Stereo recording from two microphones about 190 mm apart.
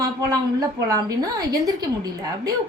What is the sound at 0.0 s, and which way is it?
A woman's voice, 20° right (ahead or behind).